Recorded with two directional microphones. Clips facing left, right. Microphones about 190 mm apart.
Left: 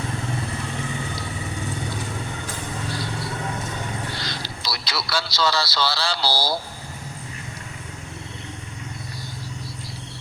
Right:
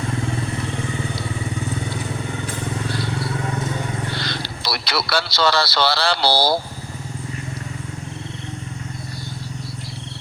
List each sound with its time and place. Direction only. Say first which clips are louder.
4.2 s speech: right 4 dB; 65° right (ahead or behind)